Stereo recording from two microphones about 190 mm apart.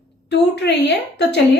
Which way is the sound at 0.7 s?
65° left (ahead or behind).